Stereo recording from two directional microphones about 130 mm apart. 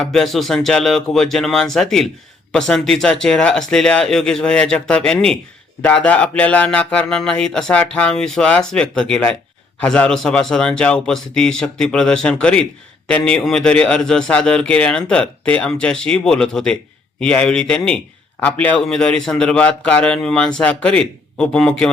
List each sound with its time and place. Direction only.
0.0 s a man's voice: centre (ahead or behind)